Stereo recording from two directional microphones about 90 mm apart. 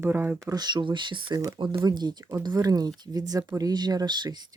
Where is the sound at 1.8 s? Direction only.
50° right (ahead or behind).